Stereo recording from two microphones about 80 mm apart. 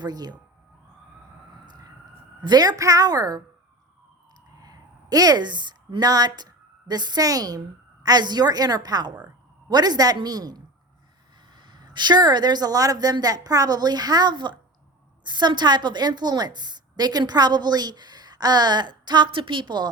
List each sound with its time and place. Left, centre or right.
0.0 s a woman's voice: right
2.4 s a woman's voice: right
4.6 s a woman's voice: right
8.0 s a woman's voice: right
11.5 s a woman's voice: right